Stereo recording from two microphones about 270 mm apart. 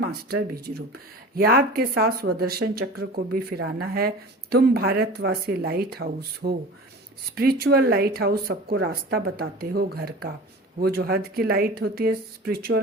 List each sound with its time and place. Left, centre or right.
0.0 s speech: right